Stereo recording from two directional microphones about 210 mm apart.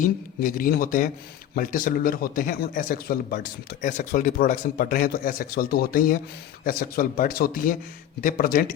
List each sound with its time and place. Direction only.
0.0 s a man's voice: 40° left (ahead or behind)